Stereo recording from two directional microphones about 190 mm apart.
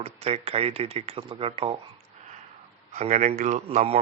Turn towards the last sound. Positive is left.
turn(degrees=-30)  # may be behind; listen again after turning